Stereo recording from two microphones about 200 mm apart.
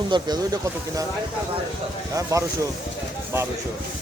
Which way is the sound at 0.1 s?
20° right (ahead or behind).